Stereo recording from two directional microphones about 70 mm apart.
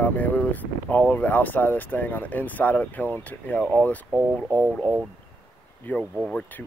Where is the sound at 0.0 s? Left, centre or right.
Left.